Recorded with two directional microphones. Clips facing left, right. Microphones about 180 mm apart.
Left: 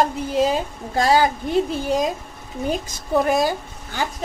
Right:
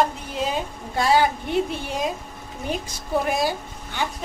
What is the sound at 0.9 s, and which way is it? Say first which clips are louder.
Speech: left 2 dB; 40° left (ahead or behind).